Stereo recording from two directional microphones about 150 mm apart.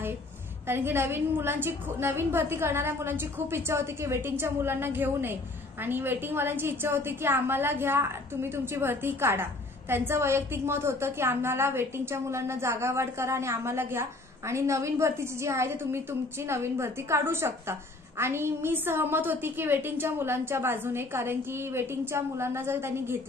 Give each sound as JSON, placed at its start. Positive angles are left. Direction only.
{"t": 0.7, "sound": "a woman's voice", "side_deg": -15}